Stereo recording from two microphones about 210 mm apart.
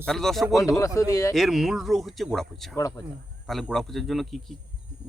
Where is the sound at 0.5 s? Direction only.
15° left (ahead or behind).